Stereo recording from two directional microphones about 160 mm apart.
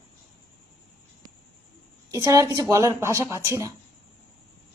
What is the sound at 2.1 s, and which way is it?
A woman's voice, 20° right (ahead or behind).